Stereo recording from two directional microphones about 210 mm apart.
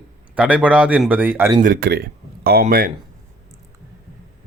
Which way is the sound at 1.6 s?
45° right (ahead or behind).